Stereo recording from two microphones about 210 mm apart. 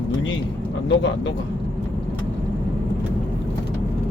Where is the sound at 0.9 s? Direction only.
60° left (ahead or behind).